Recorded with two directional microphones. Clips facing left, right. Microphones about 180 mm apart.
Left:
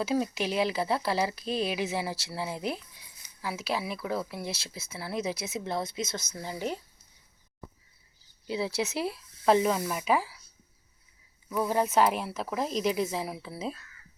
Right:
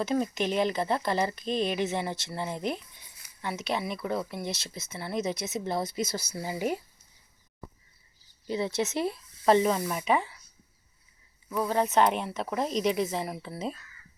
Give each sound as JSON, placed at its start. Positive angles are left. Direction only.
{"t": 0.0, "sound": "speech", "side_deg": 5}
{"t": 8.4, "sound": "speech", "side_deg": 5}
{"t": 11.5, "sound": "speech", "side_deg": 5}